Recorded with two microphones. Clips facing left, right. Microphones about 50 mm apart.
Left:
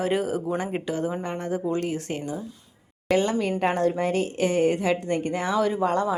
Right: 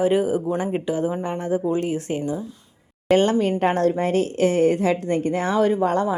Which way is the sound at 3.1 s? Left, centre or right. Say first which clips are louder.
Right 5 dB; right.